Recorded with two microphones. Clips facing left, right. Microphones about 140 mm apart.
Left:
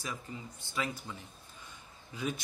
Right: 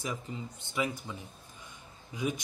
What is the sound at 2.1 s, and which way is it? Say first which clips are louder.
Speech: right 3 dB; 15° right (ahead or behind).